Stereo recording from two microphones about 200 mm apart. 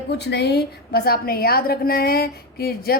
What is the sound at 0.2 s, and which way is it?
A woman's voice, 55° left (ahead or behind).